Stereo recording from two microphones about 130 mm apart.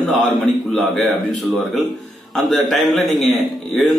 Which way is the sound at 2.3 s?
Centre (ahead or behind).